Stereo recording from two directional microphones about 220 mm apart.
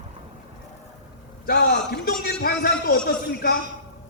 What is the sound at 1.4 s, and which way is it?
A man's voice, 45° left (ahead or behind).